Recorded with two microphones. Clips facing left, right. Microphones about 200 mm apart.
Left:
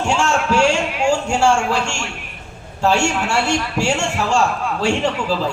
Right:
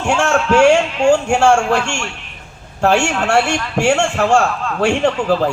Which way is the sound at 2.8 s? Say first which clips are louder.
Right 3 dB; 55° right (ahead or behind).